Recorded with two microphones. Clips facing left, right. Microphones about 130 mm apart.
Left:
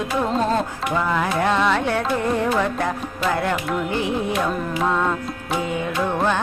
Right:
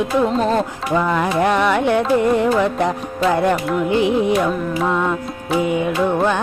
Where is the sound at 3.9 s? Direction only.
20° right (ahead or behind).